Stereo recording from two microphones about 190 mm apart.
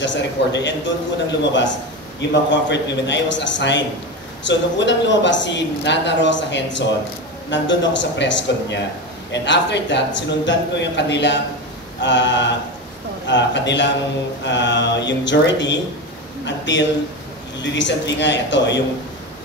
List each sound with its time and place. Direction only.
0.0 s a man's voice: 70° left (ahead or behind)